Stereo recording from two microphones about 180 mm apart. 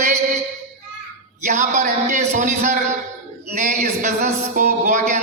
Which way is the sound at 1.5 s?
40° right (ahead or behind).